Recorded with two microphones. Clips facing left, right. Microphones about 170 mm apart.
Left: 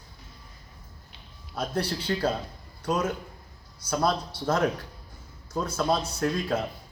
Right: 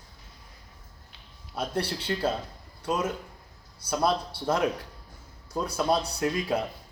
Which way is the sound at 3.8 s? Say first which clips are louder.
Left 1 dB; 30° right (ahead or behind).